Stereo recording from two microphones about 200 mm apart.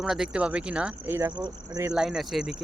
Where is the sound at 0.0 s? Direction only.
5° right (ahead or behind).